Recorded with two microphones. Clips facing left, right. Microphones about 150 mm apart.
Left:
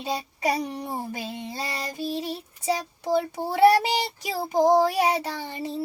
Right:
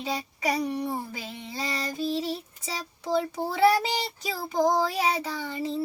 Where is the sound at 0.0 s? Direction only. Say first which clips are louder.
Left 2 dB; 15° left (ahead or behind).